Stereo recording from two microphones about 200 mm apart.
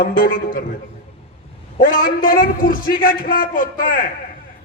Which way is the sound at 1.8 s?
45° left (ahead or behind).